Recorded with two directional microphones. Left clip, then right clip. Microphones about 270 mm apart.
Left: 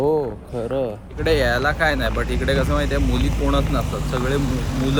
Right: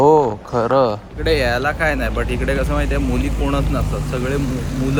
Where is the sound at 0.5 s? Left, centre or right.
Right.